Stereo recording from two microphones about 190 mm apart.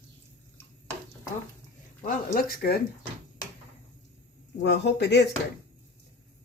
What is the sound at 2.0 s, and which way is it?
Speech, 45° left (ahead or behind).